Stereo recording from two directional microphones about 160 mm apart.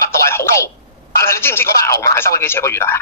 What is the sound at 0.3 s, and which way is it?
Telephone, 15° left (ahead or behind).